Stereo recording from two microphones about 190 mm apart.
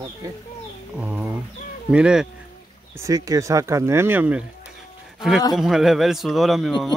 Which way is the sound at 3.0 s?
15° right (ahead or behind).